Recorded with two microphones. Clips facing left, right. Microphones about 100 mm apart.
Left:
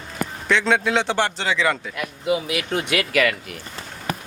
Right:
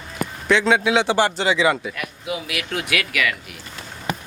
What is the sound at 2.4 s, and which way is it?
Speech, 30° left (ahead or behind).